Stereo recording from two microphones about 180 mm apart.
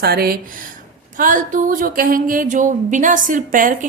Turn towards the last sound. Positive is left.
turn(degrees=-50)  # may be behind; listen again after turning